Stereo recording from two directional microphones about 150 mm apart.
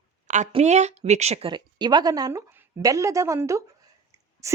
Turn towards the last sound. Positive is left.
turn(degrees=-20)  # may be behind; listen again after turning